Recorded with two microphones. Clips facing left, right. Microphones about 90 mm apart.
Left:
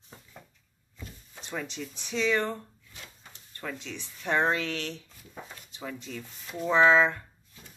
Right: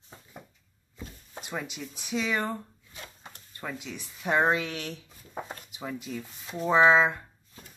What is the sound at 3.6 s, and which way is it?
A woman's voice, 10° right (ahead or behind).